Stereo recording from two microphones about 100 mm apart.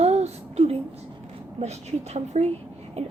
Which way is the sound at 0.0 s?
90° right.